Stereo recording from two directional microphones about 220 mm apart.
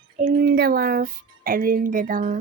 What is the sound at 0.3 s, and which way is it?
A woman's voice, 50° right (ahead or behind).